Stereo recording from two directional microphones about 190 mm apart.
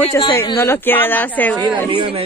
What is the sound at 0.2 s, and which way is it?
Speech, 15° left (ahead or behind).